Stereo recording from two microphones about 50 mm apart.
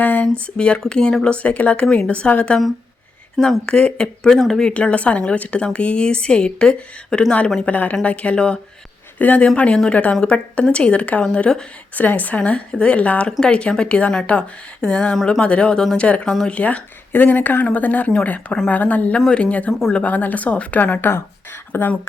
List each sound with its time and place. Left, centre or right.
0.0 s a sound: left
0.3 s a woman's voice: left
1.4 s a woman's voice: left
3.7 s speech: centre
4.7 s a woman's voice: left
7.6 s a woman's voice: left
9.1 s a woman's voice: left
9.6 s a woman's voice: left
11.9 s a woman's voice: left
17.1 s a woman's voice: left